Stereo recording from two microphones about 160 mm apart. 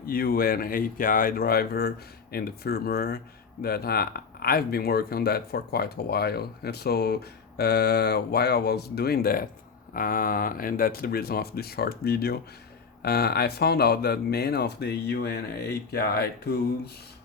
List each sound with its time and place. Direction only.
0.0 s speech: 70° left (ahead or behind)